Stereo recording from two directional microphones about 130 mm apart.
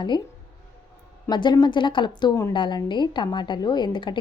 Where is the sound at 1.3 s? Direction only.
35° left (ahead or behind).